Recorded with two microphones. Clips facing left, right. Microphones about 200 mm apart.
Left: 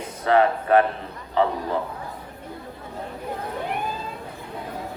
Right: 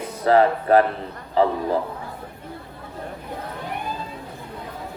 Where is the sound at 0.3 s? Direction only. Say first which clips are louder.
Right 2 dB; 35° right (ahead or behind).